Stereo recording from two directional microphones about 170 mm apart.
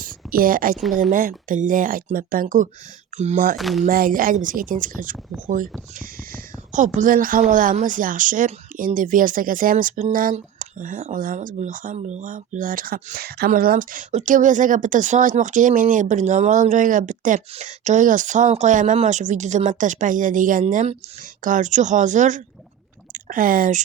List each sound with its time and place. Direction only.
0.0 s a sound: 55° right (ahead or behind)
1.1 s a woman's voice: 55° right (ahead or behind)
3.2 s speech: 40° right (ahead or behind)
3.6 s speech: centre (ahead or behind)
3.8 s a woman's voice: 55° right (ahead or behind)
6.7 s a woman's voice: 50° right (ahead or behind); by 13.5 s 65° right (ahead or behind)
13.5 s a woman's voice: 55° right (ahead or behind)